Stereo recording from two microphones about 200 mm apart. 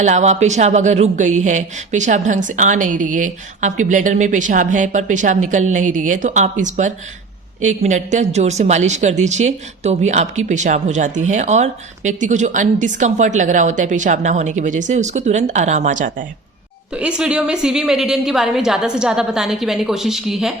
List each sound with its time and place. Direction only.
0.0 s speech: 35° right (ahead or behind)
16.9 s a woman's voice: 5° right (ahead or behind)